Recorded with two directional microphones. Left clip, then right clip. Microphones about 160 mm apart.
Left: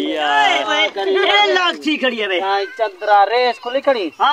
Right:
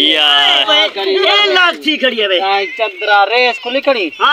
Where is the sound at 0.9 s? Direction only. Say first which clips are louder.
Right 3 dB; 35° right (ahead or behind).